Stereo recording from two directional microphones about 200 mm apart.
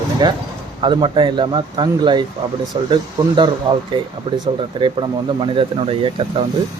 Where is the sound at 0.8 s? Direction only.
25° right (ahead or behind).